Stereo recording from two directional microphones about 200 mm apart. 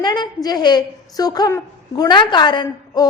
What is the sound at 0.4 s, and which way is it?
A woman's voice, 20° left (ahead or behind).